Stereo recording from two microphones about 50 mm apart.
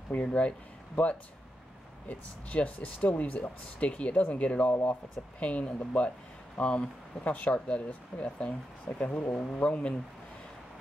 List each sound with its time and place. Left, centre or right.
0.3 s speech: left